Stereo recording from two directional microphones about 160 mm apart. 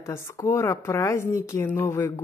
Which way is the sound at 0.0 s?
15° left (ahead or behind).